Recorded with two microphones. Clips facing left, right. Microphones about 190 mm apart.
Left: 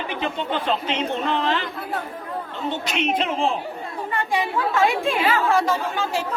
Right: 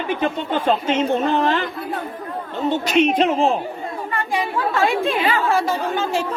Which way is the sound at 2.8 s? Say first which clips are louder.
Right 8 dB; 40° right (ahead or behind).